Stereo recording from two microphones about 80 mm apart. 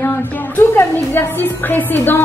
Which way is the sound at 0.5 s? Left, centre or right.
Left.